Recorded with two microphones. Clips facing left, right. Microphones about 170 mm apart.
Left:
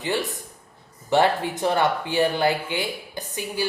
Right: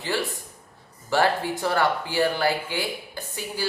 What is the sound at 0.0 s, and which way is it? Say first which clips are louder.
Speech: left 2 dB; 20° left (ahead or behind).